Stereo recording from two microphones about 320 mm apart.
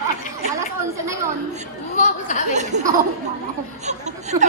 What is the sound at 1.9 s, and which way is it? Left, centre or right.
Speech, left.